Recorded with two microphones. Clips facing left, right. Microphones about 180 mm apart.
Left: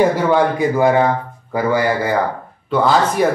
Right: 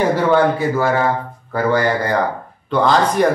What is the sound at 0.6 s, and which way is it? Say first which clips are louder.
Speech: left 3 dB; 20° left (ahead or behind).